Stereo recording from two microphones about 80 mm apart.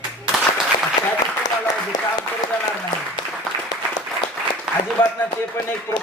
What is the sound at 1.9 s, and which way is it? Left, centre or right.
Applause, left.